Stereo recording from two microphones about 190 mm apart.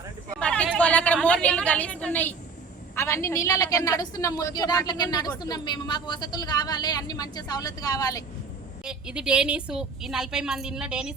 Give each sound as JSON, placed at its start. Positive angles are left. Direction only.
{"t": 0.3, "sound": "a woman's voice", "side_deg": 5}
{"t": 8.8, "sound": "a woman's voice", "side_deg": -5}